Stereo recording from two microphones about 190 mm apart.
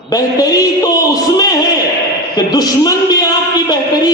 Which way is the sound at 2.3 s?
20° left (ahead or behind).